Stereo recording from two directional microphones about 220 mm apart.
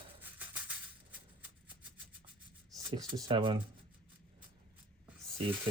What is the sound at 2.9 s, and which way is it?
Speech, 15° right (ahead or behind).